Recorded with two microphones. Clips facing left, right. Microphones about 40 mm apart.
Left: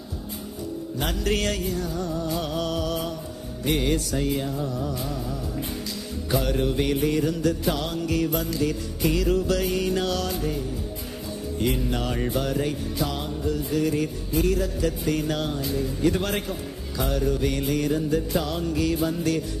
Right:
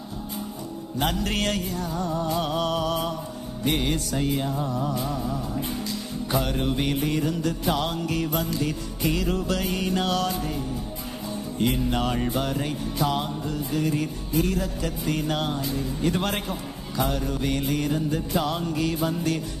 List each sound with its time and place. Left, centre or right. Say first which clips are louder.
0.9 s music: right 1 dB; centre
2.0 s music: right 2 dB; right
4.5 s music: right 1 dB; right
6.3 s music: left 2 dB; centre
11.6 s music: right 1 dB; centre
11.9 s music: right 2 dB; centre
12.1 s music: left 1 dB; centre
13.1 s music: right 1 dB; centre
13.7 s music: even; centre
15.6 s music: left 2 dB; centre